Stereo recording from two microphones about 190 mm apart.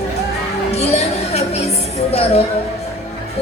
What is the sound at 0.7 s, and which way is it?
Music, 35° left (ahead or behind).